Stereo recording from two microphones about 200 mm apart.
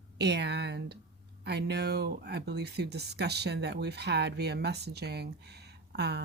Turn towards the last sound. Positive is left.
turn(degrees=-55)  # may be behind; listen again after turning